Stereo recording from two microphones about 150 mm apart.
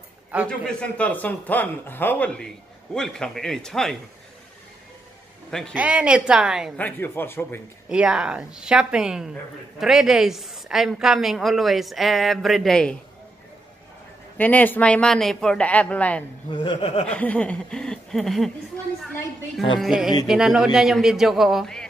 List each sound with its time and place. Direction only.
0.5 s a woman's voice: 5° left (ahead or behind)
5.5 s a woman's voice: 5° left (ahead or behind)
5.8 s a woman's voice: 10° right (ahead or behind)
6.8 s speech: 15° left (ahead or behind)
7.9 s a woman's voice: 5° right (ahead or behind)
14.4 s speech: 10° left (ahead or behind)
16.4 s speech: 30° left (ahead or behind)
17.1 s a woman's voice: 10° left (ahead or behind)
19.8 s a woman's voice: 5° right (ahead or behind)